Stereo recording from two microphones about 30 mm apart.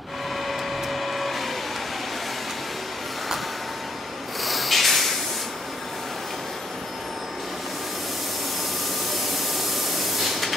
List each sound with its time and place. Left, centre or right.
0.5 s printer: centre
4.5 s rub: centre